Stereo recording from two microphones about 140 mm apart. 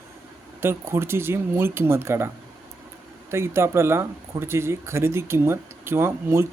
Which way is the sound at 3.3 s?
20° right (ahead or behind).